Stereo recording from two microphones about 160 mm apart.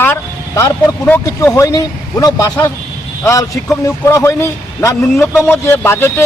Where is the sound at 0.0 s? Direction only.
15° left (ahead or behind).